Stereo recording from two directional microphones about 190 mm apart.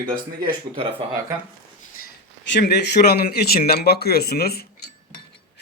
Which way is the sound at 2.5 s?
60° left (ahead or behind).